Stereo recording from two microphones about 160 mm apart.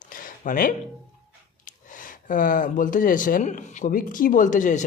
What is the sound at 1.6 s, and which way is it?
Speech, 55° left (ahead or behind).